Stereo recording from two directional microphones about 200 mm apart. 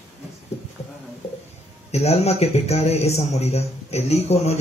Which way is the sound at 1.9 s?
30° left (ahead or behind).